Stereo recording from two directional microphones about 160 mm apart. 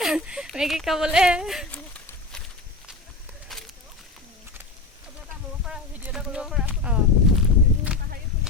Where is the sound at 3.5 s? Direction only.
Centre (ahead or behind).